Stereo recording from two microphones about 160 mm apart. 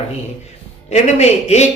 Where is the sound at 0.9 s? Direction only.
45° left (ahead or behind).